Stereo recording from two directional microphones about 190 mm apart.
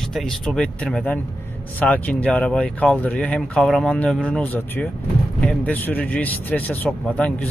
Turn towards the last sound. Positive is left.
turn(degrees=5)  # may be behind; listen again after turning